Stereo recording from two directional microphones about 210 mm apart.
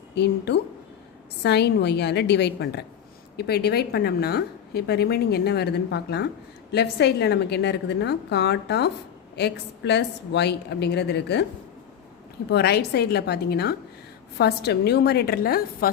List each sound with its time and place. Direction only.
0.1 s a woman's voice: 55° left (ahead or behind)
12.5 s a woman's voice: 50° left (ahead or behind)